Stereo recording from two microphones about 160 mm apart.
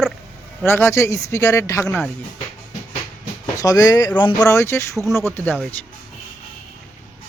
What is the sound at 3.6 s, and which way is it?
Speech, 20° left (ahead or behind).